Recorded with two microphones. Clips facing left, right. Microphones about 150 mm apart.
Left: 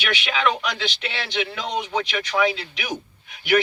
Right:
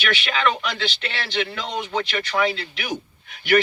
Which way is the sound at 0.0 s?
10° left (ahead or behind).